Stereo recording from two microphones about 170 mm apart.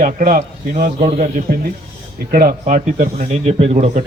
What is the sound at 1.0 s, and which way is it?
Speech, 40° right (ahead or behind).